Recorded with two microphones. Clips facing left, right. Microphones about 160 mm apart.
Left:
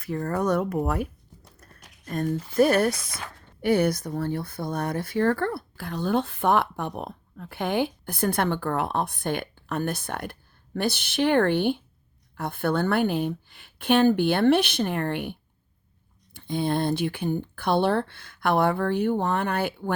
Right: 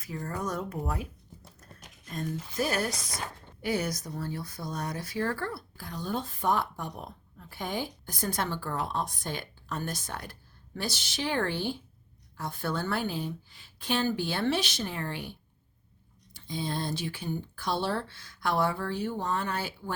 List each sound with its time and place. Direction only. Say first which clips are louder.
0.0 s speech: left 9 dB; 60° left (ahead or behind)
2.0 s speech: left 8 dB; 60° left (ahead or behind)